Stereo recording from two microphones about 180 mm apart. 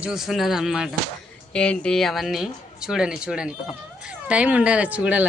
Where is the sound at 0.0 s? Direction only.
Centre (ahead or behind).